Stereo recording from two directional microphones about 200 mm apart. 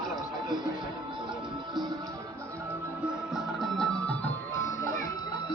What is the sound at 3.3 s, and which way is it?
Music, centre (ahead or behind).